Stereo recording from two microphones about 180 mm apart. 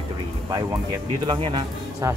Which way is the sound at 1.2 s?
25° right (ahead or behind).